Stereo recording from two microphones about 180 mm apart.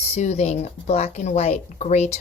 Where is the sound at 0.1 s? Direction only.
35° left (ahead or behind).